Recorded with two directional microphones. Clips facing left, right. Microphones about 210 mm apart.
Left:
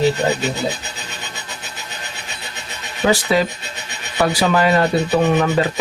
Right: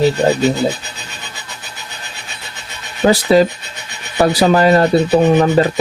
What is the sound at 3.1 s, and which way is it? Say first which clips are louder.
Speech: right 6 dB; 35° right (ahead or behind).